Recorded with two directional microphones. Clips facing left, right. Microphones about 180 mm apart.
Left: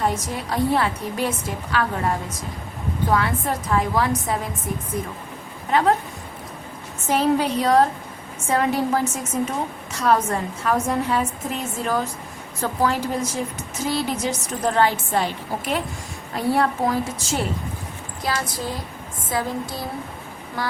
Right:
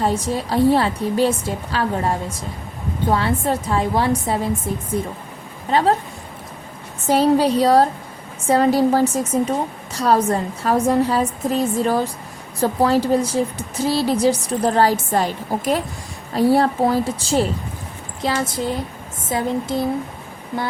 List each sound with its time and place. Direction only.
0.0 s a woman's voice: 30° right (ahead or behind)
7.1 s a woman's voice: 35° right (ahead or behind)